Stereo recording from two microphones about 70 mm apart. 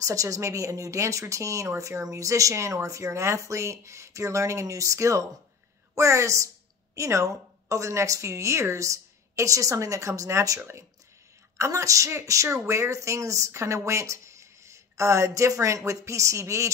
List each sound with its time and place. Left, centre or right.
0.0 s speech: right
10.6 s speech: right